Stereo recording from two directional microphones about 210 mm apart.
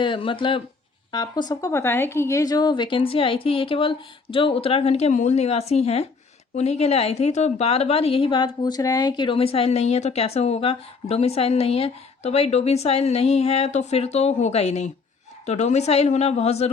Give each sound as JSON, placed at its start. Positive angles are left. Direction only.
{"t": 0.0, "sound": "a woman's voice", "side_deg": 25}